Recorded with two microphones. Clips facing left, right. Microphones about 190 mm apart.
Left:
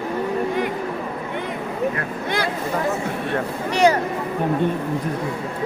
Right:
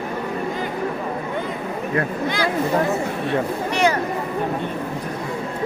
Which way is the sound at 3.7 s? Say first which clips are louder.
Left 4 dB; 40° left (ahead or behind).